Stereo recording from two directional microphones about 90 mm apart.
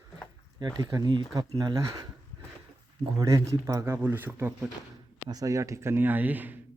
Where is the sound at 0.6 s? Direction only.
50° right (ahead or behind).